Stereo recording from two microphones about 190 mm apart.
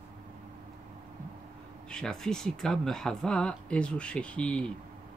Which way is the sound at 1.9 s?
5° left (ahead or behind).